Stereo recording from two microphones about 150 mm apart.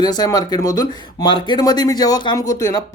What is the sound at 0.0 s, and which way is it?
Speech, 25° left (ahead or behind).